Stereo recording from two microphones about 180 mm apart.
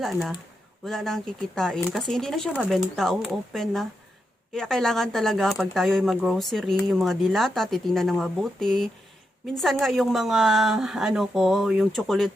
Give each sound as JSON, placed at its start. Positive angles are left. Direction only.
{"t": 0.0, "sound": "speech", "side_deg": 0}